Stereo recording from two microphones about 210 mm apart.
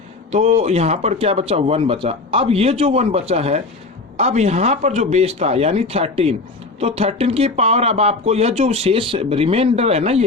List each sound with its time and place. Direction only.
0.3 s speech: 30° right (ahead or behind)